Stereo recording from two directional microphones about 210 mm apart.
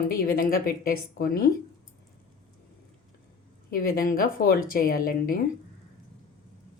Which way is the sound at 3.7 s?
45° left (ahead or behind).